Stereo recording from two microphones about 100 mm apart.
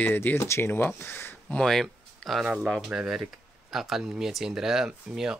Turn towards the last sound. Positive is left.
turn(degrees=-5)  # may be behind; listen again after turning